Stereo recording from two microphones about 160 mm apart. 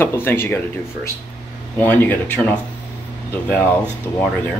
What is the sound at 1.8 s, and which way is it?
Speech, 10° left (ahead or behind).